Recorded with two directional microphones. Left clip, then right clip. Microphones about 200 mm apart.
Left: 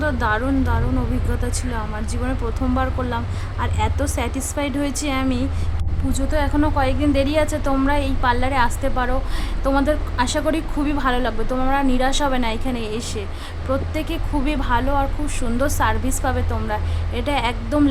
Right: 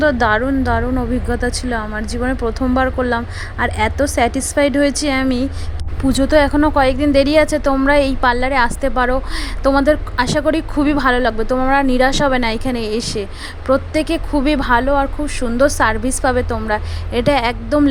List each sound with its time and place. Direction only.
0.0 s a woman's voice: 25° right (ahead or behind)